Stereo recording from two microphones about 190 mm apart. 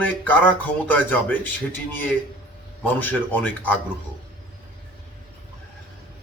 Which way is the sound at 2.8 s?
10° left (ahead or behind).